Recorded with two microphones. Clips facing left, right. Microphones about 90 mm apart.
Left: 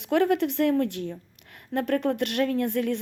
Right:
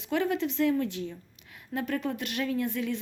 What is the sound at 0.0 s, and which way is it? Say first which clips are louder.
A woman's voice: left 6 dB; 65° left (ahead or behind).